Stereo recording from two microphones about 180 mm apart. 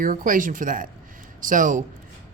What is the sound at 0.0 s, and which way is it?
Speech, 50° right (ahead or behind).